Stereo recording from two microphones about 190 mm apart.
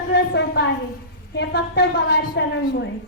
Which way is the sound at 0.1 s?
65° left (ahead or behind).